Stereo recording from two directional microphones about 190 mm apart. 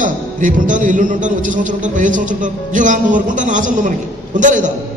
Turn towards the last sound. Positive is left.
turn(degrees=-40)  # may be behind; listen again after turning